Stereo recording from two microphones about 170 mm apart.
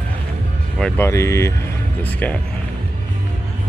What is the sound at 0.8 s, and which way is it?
Speech, 15° left (ahead or behind).